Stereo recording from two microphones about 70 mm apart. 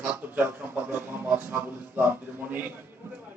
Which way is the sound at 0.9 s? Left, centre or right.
Right.